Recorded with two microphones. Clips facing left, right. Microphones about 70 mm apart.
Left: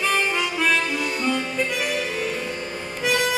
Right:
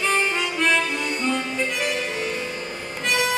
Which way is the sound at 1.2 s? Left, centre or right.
Centre.